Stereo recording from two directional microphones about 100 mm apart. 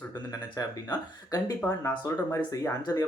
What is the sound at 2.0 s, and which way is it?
Speech, 35° left (ahead or behind).